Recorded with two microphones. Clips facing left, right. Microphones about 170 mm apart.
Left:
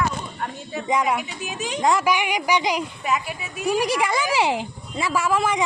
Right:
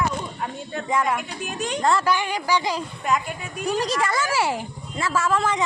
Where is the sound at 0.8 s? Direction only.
15° left (ahead or behind).